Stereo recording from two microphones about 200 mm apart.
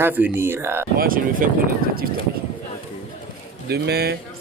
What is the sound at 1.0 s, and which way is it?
Speech, 45° right (ahead or behind).